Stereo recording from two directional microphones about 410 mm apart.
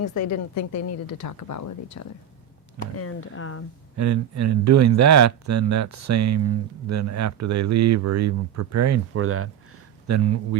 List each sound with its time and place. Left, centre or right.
0.0 s a woman's voice: left
2.9 s a woman's voice: left
3.9 s speech: right